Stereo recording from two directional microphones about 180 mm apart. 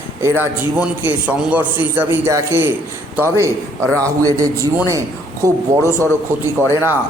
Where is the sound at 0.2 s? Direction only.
15° right (ahead or behind).